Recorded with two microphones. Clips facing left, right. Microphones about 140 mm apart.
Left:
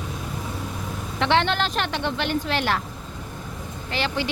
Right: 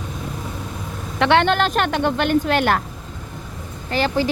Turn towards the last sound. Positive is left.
turn(degrees=-45)  # may be behind; listen again after turning